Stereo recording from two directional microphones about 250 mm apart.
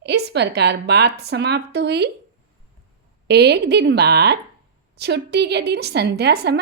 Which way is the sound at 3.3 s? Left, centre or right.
Right.